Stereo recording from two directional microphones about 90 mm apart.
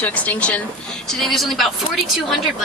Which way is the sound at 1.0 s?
Centre (ahead or behind).